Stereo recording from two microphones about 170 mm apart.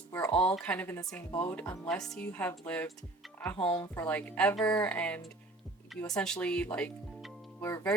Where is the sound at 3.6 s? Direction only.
30° left (ahead or behind).